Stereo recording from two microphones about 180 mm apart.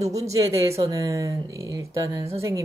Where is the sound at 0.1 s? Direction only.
20° right (ahead or behind).